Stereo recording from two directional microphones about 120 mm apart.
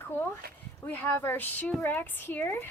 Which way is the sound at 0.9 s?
15° left (ahead or behind).